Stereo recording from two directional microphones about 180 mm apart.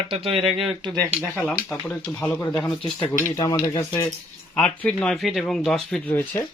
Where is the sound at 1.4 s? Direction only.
Centre (ahead or behind); by 4.0 s 20° left (ahead or behind).